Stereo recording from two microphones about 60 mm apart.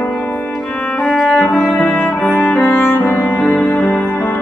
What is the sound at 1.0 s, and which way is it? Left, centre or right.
Music, centre.